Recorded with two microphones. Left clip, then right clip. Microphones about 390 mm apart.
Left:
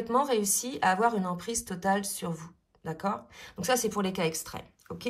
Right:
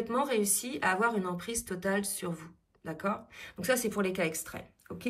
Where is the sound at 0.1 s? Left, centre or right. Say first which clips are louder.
Left 5 dB; centre.